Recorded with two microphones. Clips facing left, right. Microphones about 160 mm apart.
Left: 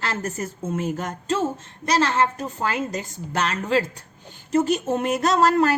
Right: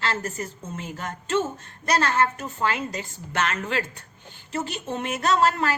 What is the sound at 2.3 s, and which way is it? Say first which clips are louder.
A woman's voice: left 1 dB; 40° left (ahead or behind).